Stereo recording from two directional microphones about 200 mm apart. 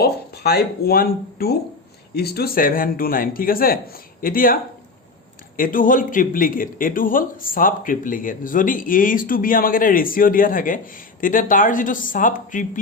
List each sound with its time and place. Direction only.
0.0 s a man's voice: 50° left (ahead or behind)